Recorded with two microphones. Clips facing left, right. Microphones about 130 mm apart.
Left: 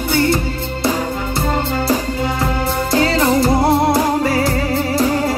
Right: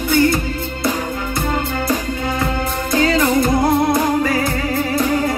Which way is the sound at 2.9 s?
30° left (ahead or behind).